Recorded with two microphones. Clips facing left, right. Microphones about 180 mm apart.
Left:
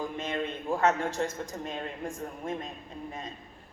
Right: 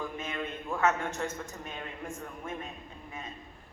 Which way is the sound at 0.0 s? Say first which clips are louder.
Left 4 dB; 35° left (ahead or behind).